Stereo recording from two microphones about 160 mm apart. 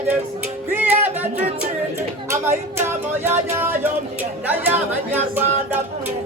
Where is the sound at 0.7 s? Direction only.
10° right (ahead or behind).